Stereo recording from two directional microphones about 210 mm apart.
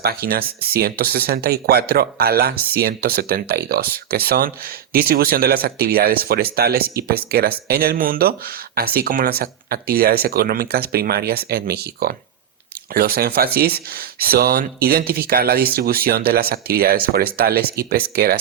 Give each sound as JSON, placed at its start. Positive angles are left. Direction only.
{"t": 0.0, "sound": "speech", "side_deg": -45}